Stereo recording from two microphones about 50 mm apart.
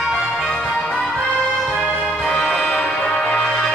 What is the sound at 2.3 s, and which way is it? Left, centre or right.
Music, centre.